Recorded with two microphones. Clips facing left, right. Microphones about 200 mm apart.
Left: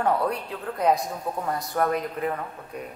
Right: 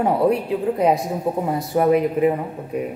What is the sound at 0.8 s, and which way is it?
Mantra, 5° right (ahead or behind).